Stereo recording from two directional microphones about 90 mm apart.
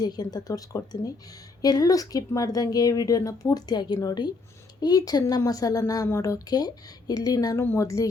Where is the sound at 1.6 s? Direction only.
45° left (ahead or behind).